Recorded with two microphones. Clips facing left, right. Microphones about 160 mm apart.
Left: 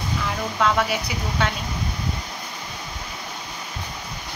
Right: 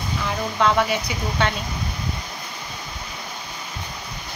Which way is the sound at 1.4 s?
5° left (ahead or behind).